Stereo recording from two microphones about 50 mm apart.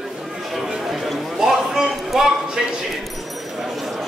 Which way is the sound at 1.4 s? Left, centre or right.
Centre.